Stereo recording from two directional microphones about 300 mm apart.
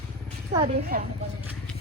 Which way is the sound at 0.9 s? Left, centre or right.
Right.